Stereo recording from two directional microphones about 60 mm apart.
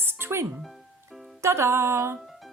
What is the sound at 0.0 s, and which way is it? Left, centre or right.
Music, right.